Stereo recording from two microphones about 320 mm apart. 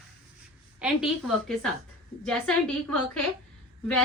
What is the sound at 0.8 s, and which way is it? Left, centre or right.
A woman's voice, centre.